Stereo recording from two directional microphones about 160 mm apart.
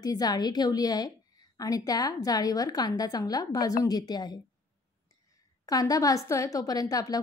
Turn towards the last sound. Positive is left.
turn(degrees=25)  # may be behind; listen again after turning